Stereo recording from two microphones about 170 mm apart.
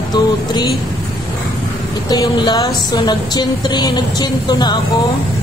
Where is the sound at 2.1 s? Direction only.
25° left (ahead or behind).